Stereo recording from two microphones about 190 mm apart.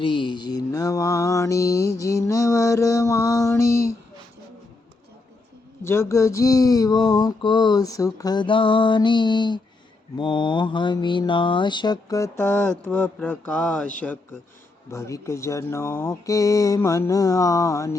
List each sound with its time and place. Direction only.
0.0 s mantra: 25° left (ahead or behind)
5.8 s a sound: 15° left (ahead or behind)
12.8 s speech: 10° left (ahead or behind)